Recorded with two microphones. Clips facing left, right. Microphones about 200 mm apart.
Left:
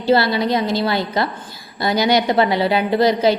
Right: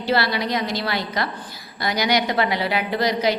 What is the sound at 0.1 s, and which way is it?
A woman's voice, 25° left (ahead or behind).